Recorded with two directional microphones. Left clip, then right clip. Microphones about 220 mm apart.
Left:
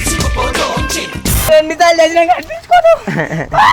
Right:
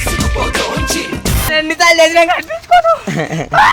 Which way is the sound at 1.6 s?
40° right (ahead or behind).